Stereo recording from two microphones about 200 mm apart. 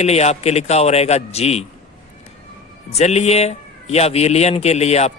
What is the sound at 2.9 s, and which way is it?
Speech, 35° left (ahead or behind).